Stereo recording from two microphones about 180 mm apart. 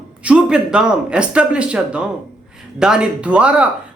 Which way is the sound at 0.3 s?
5° right (ahead or behind).